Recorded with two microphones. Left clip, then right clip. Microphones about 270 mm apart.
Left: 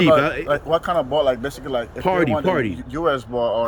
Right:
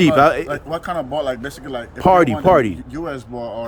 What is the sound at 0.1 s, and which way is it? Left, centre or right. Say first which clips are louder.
Speech: right 3 dB; centre.